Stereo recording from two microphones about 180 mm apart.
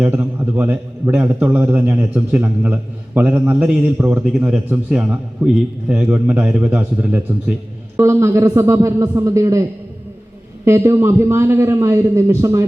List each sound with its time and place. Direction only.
0.0 s a man's voice: 10° right (ahead or behind)
10.7 s a man's voice: 15° right (ahead or behind)